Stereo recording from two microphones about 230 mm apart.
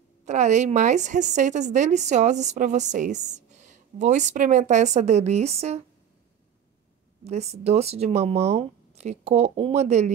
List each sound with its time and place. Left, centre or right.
0.2 s speech: right
7.2 s speech: right